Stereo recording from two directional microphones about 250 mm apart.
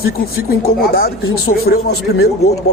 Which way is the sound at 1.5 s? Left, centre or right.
Left.